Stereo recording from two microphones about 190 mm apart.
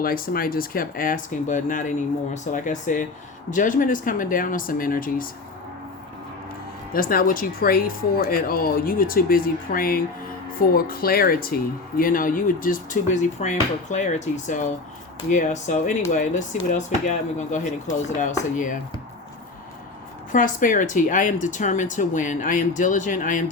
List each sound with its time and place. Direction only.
0.0 s speech: 50° left (ahead or behind)
6.9 s speech: 50° left (ahead or behind)
20.3 s speech: 45° left (ahead or behind)